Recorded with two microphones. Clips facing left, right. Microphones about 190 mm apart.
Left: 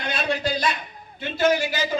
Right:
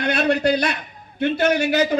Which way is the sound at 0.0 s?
65° right (ahead or behind).